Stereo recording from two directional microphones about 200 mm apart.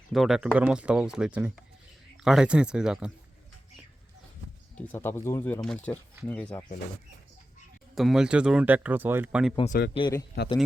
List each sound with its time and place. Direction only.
0.1 s speech: centre (ahead or behind)
4.9 s speech: 10° left (ahead or behind)
7.9 s speech: centre (ahead or behind)
9.6 s a man's voice: 50° left (ahead or behind)
9.9 s speech: 20° left (ahead or behind)